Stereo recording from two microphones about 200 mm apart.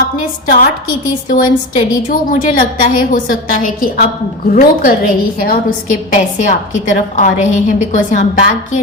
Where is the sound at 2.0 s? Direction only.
40° left (ahead or behind).